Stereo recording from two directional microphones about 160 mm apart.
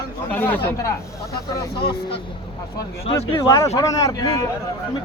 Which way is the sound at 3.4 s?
20° left (ahead or behind).